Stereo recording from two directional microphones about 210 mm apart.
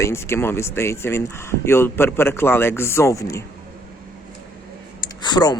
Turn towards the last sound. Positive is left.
turn(degrees=20)  # may be behind; listen again after turning